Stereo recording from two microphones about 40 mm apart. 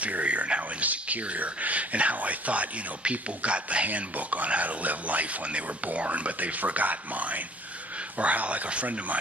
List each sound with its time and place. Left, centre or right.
0.0 s speech: right